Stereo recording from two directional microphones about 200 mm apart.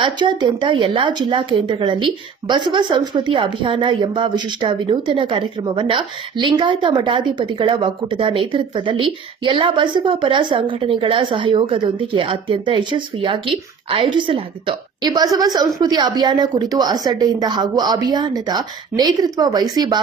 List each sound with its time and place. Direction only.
0.0 s a woman's voice: 25° right (ahead or behind)